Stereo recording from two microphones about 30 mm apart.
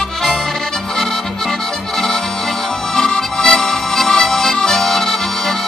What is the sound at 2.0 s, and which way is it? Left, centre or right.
Accordion, centre.